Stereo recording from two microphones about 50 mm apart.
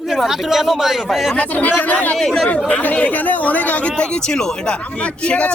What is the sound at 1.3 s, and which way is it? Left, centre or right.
Speech, left.